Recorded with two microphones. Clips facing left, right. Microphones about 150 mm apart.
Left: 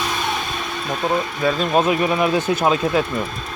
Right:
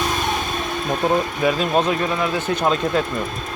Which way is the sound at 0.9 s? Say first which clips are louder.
Right 2 dB; 20° right (ahead or behind).